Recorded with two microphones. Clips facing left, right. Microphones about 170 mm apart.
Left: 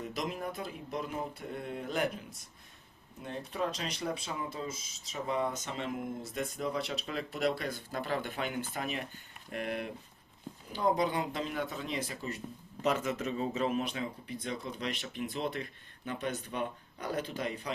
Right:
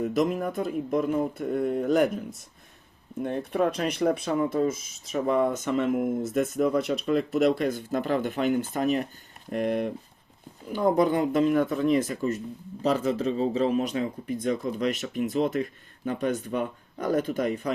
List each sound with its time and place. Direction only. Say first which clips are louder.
0.0 s speech: right 11 dB; 50° right (ahead or behind)
3.2 s speech: right 9 dB; 60° right (ahead or behind)
12.8 s speech: right 7 dB; 35° right (ahead or behind)